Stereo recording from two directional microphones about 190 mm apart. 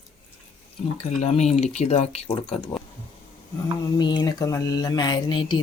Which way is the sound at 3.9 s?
25° left (ahead or behind).